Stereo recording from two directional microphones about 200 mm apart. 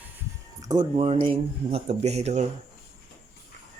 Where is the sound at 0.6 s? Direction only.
20° right (ahead or behind).